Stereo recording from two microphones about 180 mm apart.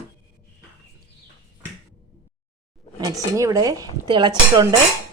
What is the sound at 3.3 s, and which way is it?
Speech, 15° right (ahead or behind).